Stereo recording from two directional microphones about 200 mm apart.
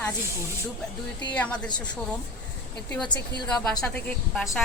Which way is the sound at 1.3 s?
5° left (ahead or behind).